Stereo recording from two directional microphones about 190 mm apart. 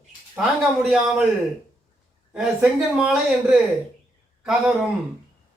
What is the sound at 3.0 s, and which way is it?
A man's voice, 5° right (ahead or behind).